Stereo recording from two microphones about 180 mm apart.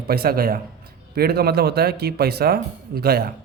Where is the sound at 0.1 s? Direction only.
55° right (ahead or behind).